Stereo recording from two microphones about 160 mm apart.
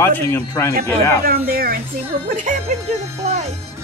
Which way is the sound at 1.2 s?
70° right (ahead or behind).